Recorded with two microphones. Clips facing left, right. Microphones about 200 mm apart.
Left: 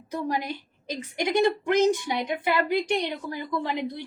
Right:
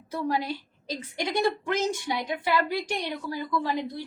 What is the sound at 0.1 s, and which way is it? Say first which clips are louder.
A woman's voice: even; 15° left (ahead or behind).